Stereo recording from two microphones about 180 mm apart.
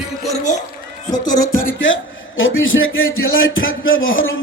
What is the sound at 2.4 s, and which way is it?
A man's voice, 90° left.